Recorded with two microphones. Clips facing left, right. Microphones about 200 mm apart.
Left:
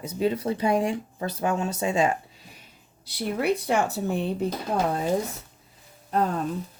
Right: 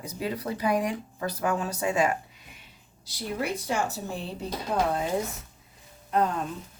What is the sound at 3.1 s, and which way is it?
Speech, 60° left (ahead or behind).